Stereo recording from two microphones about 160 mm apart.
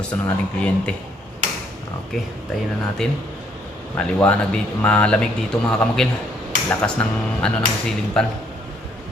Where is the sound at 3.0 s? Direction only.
5° left (ahead or behind).